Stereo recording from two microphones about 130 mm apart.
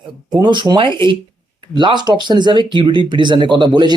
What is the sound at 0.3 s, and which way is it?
Speech, 35° right (ahead or behind).